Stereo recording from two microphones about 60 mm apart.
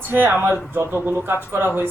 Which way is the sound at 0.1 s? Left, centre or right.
Right.